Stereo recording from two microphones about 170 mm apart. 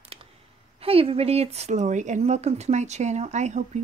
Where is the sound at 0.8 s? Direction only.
35° right (ahead or behind).